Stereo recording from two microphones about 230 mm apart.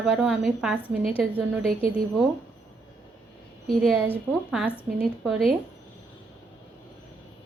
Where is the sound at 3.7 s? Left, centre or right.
Centre.